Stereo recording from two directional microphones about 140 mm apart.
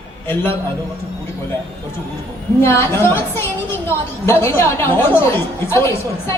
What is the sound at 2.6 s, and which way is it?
A woman's voice, 20° left (ahead or behind).